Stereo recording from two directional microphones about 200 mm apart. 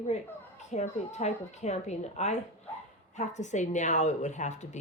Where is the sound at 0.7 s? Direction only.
35° left (ahead or behind).